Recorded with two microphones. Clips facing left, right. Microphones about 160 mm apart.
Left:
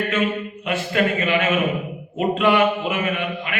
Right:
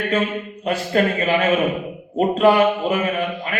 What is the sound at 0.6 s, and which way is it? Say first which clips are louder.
Speech: right 3 dB; 35° right (ahead or behind).